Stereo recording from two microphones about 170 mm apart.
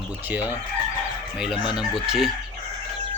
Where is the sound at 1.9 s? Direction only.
Centre (ahead or behind).